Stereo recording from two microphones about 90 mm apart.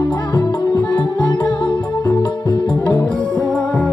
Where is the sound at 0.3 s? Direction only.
60° left (ahead or behind).